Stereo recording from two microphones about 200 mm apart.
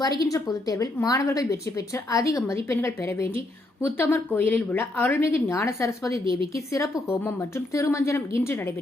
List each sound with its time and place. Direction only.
0.2 s a woman's voice: 15° left (ahead or behind)